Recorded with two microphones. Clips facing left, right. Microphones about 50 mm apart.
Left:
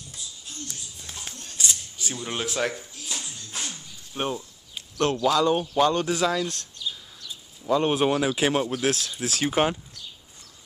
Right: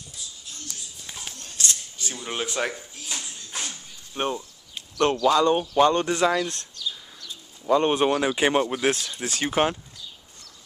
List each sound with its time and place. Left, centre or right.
1.6 s a sound: centre
2.1 s speech: centre
3.5 s a sound: centre
5.2 s speech: centre
6.2 s speech: centre
6.8 s bird: centre
7.6 s speech: centre